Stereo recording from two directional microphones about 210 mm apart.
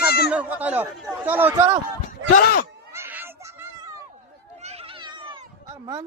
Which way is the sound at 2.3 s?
45° left (ahead or behind).